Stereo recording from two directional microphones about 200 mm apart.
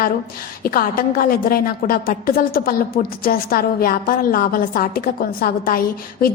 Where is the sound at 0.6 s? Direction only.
45° left (ahead or behind).